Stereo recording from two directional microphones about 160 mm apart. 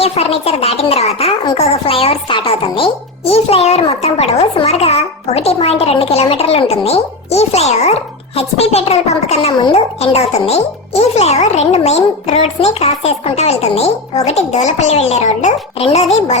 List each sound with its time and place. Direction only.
0.0 s a child's voice: 40° left (ahead or behind)
1.5 s music: 40° left (ahead or behind)
8.4 s a child's voice: 40° left (ahead or behind)